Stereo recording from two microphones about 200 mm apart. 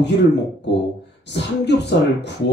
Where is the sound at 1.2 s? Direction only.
60° left (ahead or behind).